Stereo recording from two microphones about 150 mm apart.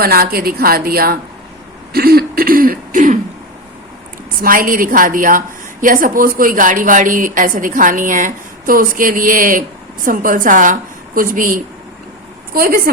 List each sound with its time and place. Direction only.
0.0 s a woman's voice: 90° right
1.9 s throat clearing: 90° right; by 3.2 s 60° right (ahead or behind)
4.4 s a woman's voice: 65° right (ahead or behind)
12.5 s a woman's voice: 75° right (ahead or behind)